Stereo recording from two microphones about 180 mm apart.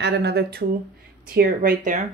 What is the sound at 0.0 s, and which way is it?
Speech, 70° right (ahead or behind).